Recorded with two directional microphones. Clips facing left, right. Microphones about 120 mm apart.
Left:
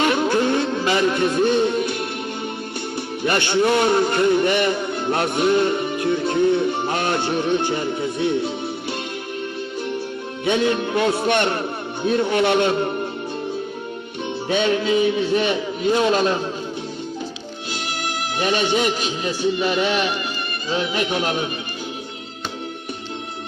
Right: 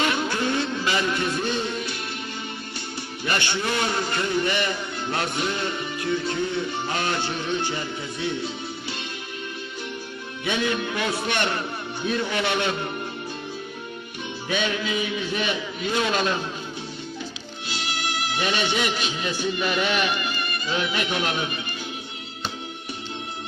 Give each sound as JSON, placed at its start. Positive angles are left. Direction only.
{"t": 0.0, "sound": "vehicle", "side_deg": 50}
{"t": 1.3, "sound": "music", "side_deg": 50}
{"t": 3.2, "sound": "a man's voice", "side_deg": 50}
{"t": 10.6, "sound": "a man's voice", "side_deg": 40}
{"t": 12.3, "sound": "a man's voice", "side_deg": 55}
{"t": 12.6, "sound": "a man's voice", "side_deg": 35}
{"t": 14.4, "sound": "a man's voice", "side_deg": 30}
{"t": 17.7, "sound": "speech", "side_deg": 50}